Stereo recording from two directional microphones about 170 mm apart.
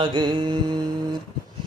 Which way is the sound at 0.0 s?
25° right (ahead or behind).